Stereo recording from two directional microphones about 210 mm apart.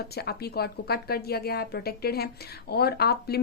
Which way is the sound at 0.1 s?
50° left (ahead or behind).